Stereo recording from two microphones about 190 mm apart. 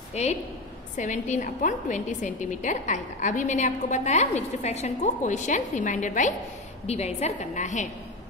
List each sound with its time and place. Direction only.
0.1 s a woman's voice: 35° left (ahead or behind)